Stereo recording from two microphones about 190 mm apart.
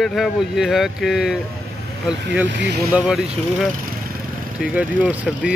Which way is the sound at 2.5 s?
65° right (ahead or behind).